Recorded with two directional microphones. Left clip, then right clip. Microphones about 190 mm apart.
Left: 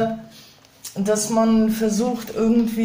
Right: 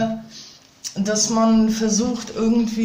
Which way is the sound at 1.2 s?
20° right (ahead or behind).